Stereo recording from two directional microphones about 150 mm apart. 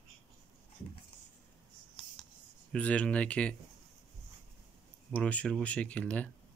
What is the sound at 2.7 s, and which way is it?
Speech, 10° left (ahead or behind).